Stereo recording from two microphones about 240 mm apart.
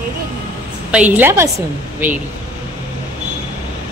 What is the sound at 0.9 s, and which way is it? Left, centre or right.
Speech, centre.